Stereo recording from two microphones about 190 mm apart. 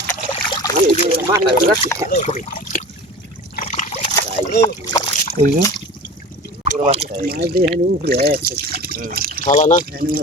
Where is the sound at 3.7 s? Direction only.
35° left (ahead or behind).